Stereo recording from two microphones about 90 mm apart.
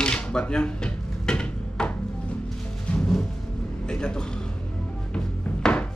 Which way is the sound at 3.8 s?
10° left (ahead or behind).